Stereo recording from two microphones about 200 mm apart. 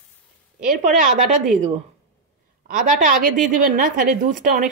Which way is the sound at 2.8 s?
40° right (ahead or behind).